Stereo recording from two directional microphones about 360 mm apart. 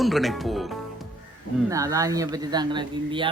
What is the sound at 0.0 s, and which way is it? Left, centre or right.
Speech, centre.